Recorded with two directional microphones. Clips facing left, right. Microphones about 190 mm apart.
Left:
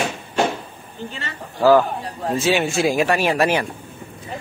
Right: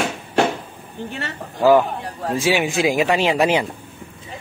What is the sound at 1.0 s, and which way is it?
Speech, 65° right (ahead or behind).